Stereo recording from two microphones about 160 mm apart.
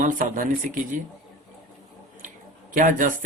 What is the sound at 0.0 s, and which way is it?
Speech, 55° right (ahead or behind).